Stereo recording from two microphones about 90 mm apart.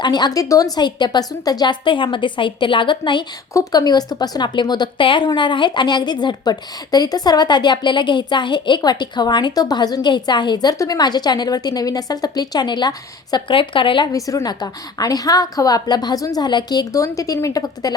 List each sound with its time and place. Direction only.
0.0 s speech: 55° left (ahead or behind)
0.8 s a woman's voice: 55° left (ahead or behind)
3.5 s speech: 40° left (ahead or behind)
13.5 s speech: 75° left (ahead or behind)
14.1 s speech: 40° left (ahead or behind)